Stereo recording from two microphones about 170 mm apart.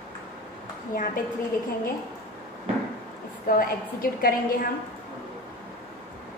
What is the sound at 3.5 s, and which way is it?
Speech, 60° left (ahead or behind).